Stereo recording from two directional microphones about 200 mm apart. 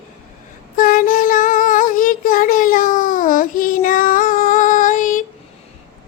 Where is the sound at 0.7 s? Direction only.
45° left (ahead or behind).